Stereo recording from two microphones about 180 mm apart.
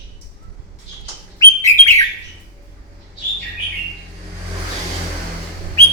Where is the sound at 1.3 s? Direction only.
15° left (ahead or behind).